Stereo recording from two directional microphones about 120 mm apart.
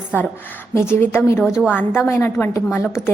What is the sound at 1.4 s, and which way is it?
Speech, 5° right (ahead or behind).